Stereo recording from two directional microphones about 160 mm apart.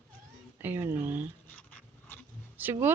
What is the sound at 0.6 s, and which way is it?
Speech, 15° right (ahead or behind).